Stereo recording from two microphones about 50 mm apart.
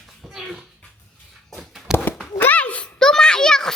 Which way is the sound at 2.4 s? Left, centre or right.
Left.